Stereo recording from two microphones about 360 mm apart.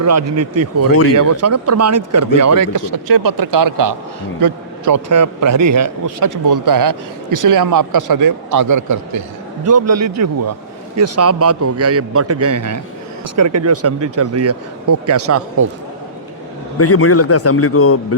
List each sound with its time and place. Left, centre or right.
0.0 s speech: right
2.9 s a man's voice: right
16.7 s a man's voice: left